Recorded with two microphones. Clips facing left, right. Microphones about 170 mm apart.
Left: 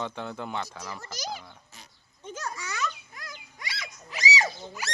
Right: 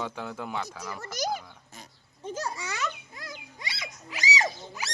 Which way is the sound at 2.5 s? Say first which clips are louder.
Even; 20° right (ahead or behind).